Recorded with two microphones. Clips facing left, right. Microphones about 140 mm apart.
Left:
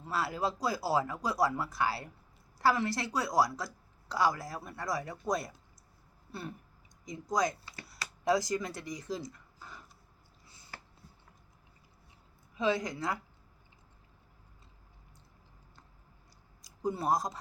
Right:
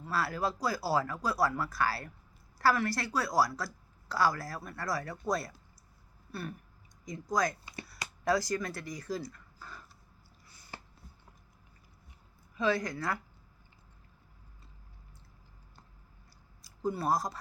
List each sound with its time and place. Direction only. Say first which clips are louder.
0.0 s speech: even; 20° left (ahead or behind)
10.4 s a sound: left 1 dB; 25° left (ahead or behind)
12.5 s speech: even; 20° left (ahead or behind)
16.6 s speech: even; 20° left (ahead or behind)